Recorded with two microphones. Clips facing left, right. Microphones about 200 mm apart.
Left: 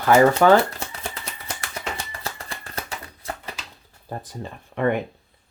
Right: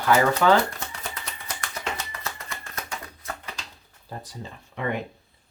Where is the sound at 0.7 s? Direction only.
25° left (ahead or behind).